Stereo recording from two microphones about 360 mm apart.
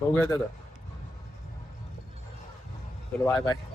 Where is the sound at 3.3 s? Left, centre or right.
Centre.